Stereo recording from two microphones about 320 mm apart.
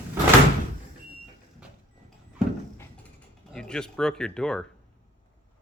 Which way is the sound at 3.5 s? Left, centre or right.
Centre.